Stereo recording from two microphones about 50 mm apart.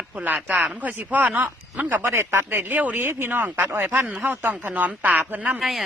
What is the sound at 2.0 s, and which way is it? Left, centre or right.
Speech, right.